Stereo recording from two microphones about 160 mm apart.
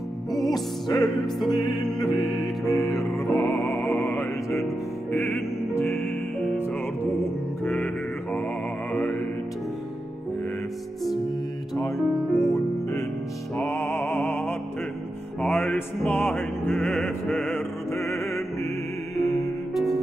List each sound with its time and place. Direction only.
0.5 s music: 25° left (ahead or behind)
1.2 s music: centre (ahead or behind)
4.1 s music: 15° left (ahead or behind)
5.9 s music: centre (ahead or behind)
7.6 s mantra: 10° left (ahead or behind)
12.2 s music: centre (ahead or behind)
15.4 s music: 5° left (ahead or behind)
19.1 s music: centre (ahead or behind)